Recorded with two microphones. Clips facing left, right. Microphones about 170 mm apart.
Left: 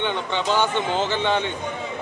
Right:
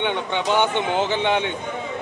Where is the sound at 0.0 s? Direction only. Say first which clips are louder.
Right 1 dB; 15° right (ahead or behind).